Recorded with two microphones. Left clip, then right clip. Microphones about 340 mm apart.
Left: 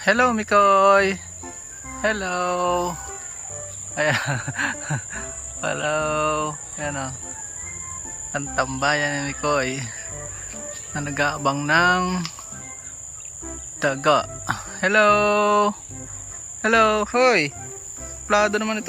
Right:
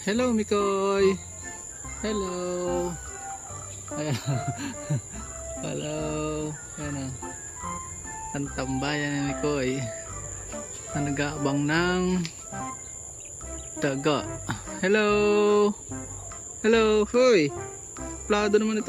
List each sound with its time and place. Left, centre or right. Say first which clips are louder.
0.0 s speech: left 8 dB; centre
2.5 s speech: left 7 dB; centre
4.5 s speech: left 11 dB; centre
5.9 s speech: left 9 dB; centre
8.3 s speech: left 8 dB; centre
10.9 s speech: left 6 dB; centre
13.7 s speech: left 7 dB; centre